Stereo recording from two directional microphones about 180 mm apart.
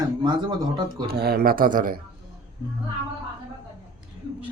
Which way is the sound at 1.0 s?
60° right (ahead or behind).